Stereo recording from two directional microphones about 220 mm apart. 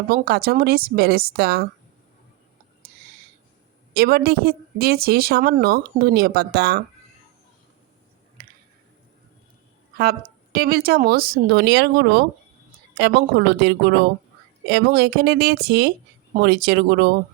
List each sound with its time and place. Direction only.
0.1 s a woman's voice: 45° right (ahead or behind)
3.9 s a woman's voice: 45° right (ahead or behind)
10.0 s a woman's voice: 45° right (ahead or behind)